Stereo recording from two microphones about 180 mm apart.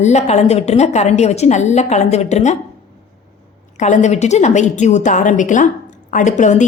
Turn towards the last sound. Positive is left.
turn(degrees=40)  # may be behind; listen again after turning